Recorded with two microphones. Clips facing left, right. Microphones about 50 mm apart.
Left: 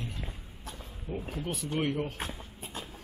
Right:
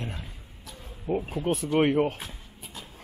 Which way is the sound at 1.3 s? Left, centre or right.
Right.